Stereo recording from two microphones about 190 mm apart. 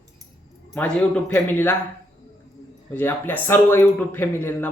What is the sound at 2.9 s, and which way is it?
A man's voice, 10° left (ahead or behind).